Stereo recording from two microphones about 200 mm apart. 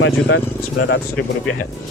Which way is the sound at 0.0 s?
65° left (ahead or behind).